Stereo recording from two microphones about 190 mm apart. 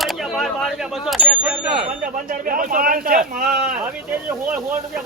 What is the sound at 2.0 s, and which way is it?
Speech, 45° right (ahead or behind).